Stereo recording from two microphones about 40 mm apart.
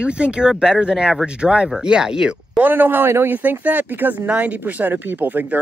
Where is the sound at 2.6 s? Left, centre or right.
Right.